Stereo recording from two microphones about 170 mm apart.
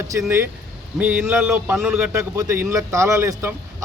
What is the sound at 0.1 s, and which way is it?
A man's voice, 15° right (ahead or behind).